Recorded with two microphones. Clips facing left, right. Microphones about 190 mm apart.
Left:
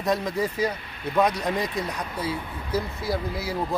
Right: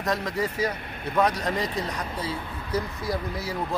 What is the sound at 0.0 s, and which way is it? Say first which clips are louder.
Speech: left 2 dB; 10° left (ahead or behind).